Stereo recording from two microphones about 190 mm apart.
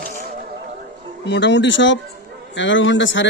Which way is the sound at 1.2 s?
70° left (ahead or behind).